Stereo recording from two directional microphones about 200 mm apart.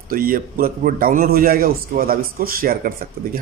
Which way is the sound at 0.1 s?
45° right (ahead or behind).